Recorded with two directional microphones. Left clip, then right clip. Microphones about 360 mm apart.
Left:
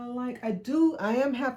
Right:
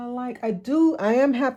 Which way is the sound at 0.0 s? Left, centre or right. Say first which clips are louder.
Right 5 dB; right.